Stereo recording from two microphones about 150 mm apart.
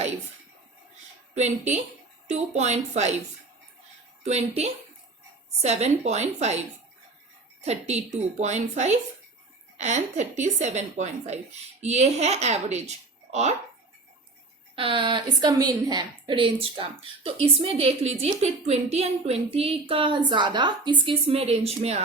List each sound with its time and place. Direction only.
2.2 s a woman's voice: 50° right (ahead or behind)
4.2 s a woman's voice: 45° right (ahead or behind)
7.6 s a woman's voice: 45° right (ahead or behind)
14.8 s a woman's voice: 35° right (ahead or behind)